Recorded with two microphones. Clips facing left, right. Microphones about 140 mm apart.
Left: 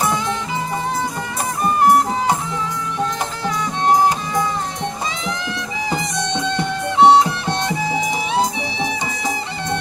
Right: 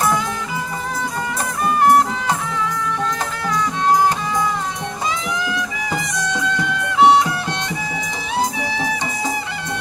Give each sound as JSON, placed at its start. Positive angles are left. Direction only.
{"t": 5.5, "sound": "music", "side_deg": 25}